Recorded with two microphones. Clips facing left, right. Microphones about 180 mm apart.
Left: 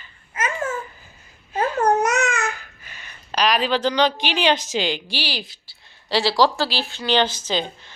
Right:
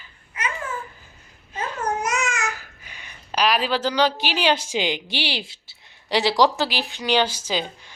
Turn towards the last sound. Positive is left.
turn(degrees=-10)  # may be behind; listen again after turning